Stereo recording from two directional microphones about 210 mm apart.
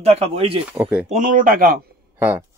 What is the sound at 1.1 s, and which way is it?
Speech, 40° right (ahead or behind).